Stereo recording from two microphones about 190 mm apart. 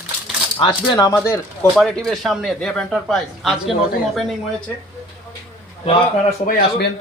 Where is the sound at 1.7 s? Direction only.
Centre (ahead or behind).